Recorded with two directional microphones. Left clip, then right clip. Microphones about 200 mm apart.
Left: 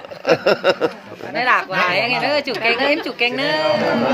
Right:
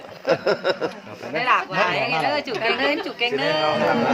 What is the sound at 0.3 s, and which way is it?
A woman's voice, 50° left (ahead or behind).